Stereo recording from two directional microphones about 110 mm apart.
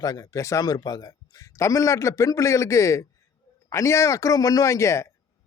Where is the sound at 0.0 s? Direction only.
35° left (ahead or behind).